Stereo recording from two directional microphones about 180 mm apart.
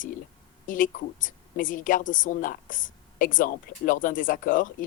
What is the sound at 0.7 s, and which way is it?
A woman's voice, 50° left (ahead or behind).